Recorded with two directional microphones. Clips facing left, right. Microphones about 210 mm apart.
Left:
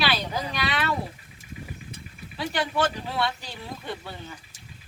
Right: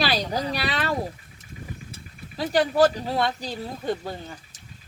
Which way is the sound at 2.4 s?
40° right (ahead or behind).